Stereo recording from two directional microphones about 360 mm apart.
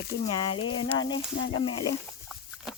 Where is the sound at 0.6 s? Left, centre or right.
Left.